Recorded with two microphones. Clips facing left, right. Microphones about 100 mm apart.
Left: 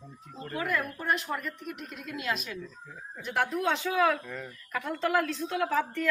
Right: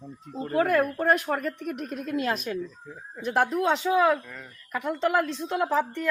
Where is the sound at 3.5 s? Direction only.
20° right (ahead or behind).